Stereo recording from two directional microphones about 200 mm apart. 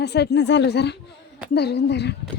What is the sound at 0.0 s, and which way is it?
A woman's voice, 55° left (ahead or behind).